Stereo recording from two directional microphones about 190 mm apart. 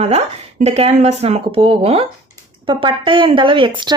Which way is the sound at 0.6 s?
35° right (ahead or behind).